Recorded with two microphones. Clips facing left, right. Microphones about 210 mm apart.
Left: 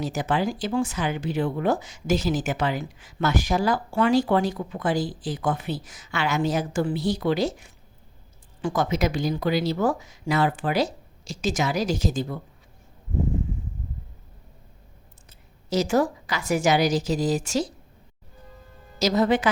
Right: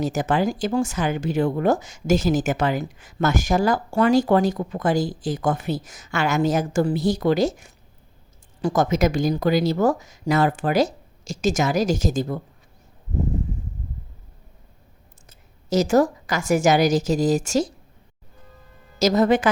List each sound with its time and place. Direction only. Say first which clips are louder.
0.0 s speech: right 4 dB; 45° right (ahead or behind)
15.3 s a woman's voice: right 4 dB; 45° right (ahead or behind)
18.9 s speech: right 3 dB; 45° right (ahead or behind)